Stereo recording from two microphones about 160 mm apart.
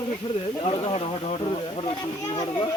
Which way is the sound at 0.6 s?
35° left (ahead or behind).